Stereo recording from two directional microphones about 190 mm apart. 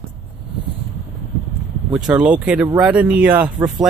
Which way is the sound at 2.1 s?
5° right (ahead or behind).